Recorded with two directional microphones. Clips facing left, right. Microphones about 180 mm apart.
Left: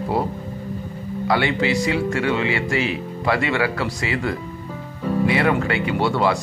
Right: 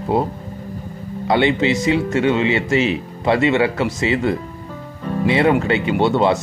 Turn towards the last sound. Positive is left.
turn(degrees=-20)  # may be behind; listen again after turning